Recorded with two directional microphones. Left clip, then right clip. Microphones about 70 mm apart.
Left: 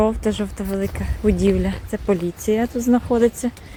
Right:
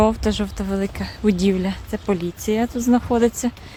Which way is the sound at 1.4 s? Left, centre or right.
Right.